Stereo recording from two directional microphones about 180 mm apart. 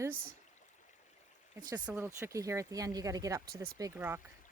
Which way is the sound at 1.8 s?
10° right (ahead or behind).